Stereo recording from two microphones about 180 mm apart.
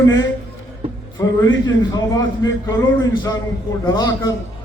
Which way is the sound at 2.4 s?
90° left.